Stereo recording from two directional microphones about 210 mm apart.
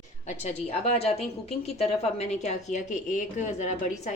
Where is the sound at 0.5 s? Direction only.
30° left (ahead or behind).